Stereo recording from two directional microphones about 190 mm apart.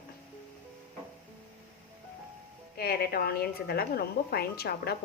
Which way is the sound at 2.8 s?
50° left (ahead or behind).